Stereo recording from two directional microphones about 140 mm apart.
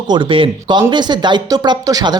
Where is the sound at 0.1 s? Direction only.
35° right (ahead or behind).